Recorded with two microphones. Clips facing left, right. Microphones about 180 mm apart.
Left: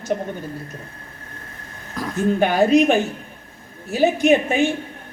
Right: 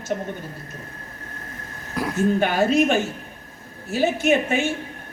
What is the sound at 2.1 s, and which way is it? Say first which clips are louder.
Speech: left 3 dB; 15° left (ahead or behind).